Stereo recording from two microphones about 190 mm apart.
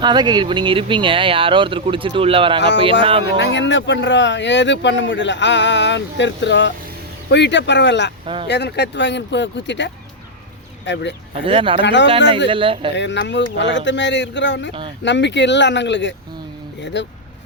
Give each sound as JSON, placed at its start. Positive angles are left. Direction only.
{"t": 0.0, "sound": "speech", "side_deg": -20}
{"t": 3.3, "sound": "speech", "side_deg": 70}
{"t": 11.4, "sound": "speech", "side_deg": -30}
{"t": 11.8, "sound": "speech", "side_deg": 70}
{"t": 12.5, "sound": "speech", "side_deg": -25}
{"t": 13.0, "sound": "speech", "side_deg": 70}